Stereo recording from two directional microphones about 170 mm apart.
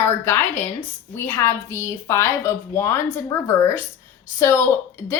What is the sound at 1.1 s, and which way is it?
A woman's voice, 15° left (ahead or behind).